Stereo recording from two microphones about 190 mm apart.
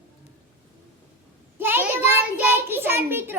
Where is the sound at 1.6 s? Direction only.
10° right (ahead or behind).